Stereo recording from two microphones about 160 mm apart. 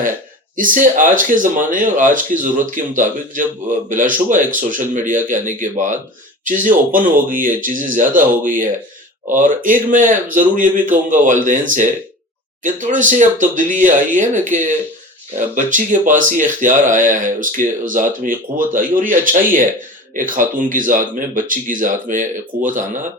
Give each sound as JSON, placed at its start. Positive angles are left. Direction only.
{"t": 0.5, "sound": "speech", "side_deg": -55}